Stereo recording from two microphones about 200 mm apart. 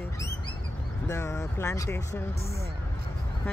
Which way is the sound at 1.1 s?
15° left (ahead or behind).